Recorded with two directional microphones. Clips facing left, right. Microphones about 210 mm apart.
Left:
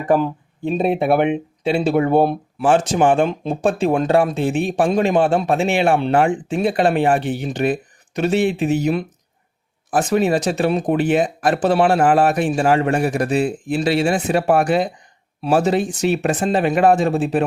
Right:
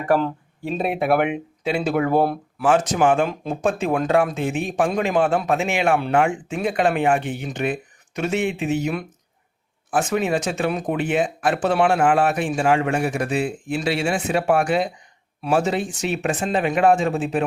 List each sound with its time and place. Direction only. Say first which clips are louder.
0.1 s speech: left 3 dB; 15° left (ahead or behind); by 17.4 s 35° left (ahead or behind)